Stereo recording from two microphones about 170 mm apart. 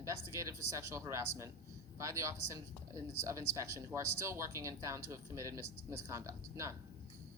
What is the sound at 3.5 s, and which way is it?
Speech, 20° right (ahead or behind).